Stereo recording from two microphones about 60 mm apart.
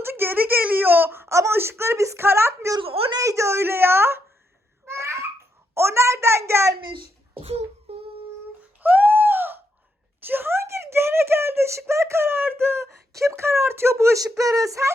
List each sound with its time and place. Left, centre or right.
0.0 s speech: right
1.3 s speech: right
1.5 s a woman's voice: right
2.7 s a woman's voice: right
4.9 s babbling: right
5.7 s a woman's voice: right
8.8 s a sound: right
10.2 s a woman's voice: right
13.1 s a woman's voice: right
14.2 s speech: right